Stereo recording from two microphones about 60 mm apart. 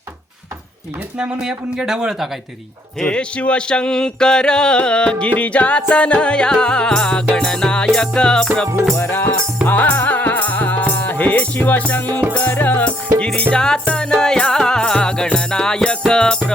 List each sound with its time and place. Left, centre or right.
1.2 s speech: centre
3.0 s a sound: centre
9.0 s music: left; by 16.4 s centre